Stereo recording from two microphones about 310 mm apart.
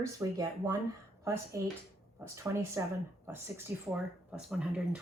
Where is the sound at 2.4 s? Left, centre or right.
Centre.